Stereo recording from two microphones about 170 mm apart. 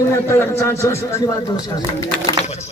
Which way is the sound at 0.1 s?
15° left (ahead or behind).